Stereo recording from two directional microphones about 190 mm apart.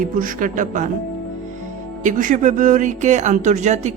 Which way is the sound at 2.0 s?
45° right (ahead or behind).